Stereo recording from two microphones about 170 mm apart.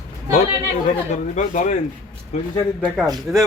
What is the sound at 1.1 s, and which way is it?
Speech, 45° left (ahead or behind).